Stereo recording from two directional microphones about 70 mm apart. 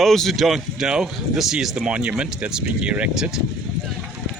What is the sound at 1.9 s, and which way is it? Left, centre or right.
Speech, centre.